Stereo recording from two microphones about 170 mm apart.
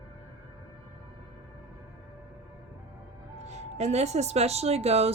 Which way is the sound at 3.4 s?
40° right (ahead or behind).